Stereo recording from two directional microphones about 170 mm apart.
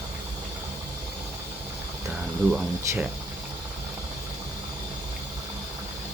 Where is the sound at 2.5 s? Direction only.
10° right (ahead or behind).